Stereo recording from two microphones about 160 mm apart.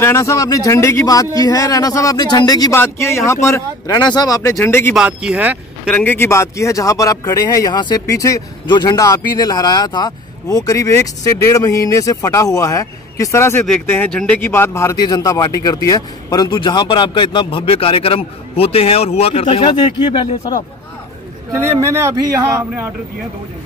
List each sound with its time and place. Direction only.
0.0 s speech: 15° left (ahead or behind)
4.9 s a man's voice: 5° right (ahead or behind)
5.9 s speech: 10° left (ahead or behind); by 20.5 s 30° left (ahead or behind)
21.5 s a man's voice: 20° right (ahead or behind)